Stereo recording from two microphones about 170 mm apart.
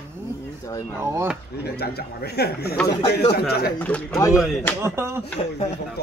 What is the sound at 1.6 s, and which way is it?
Speech, 70° left (ahead or behind).